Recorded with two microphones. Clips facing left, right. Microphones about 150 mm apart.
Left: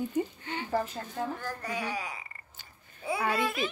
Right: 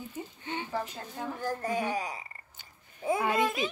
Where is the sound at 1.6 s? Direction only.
45° right (ahead or behind).